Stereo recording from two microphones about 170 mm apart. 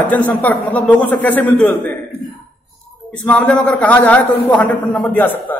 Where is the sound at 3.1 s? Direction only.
10° left (ahead or behind).